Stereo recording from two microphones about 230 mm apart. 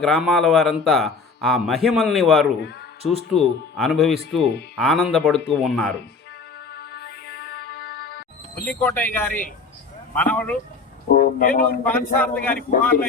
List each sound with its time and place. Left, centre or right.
0.0 s a man's voice: centre
3.0 s speech: right
3.3 s a man's voice: centre
6.9 s music: left
8.6 s a man's voice: centre
11.1 s speech: left
11.8 s a man's voice: centre